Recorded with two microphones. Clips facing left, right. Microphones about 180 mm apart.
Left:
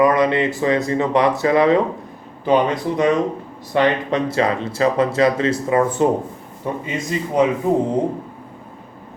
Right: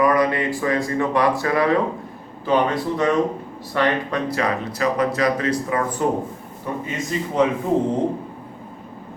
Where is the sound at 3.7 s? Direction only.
20° left (ahead or behind).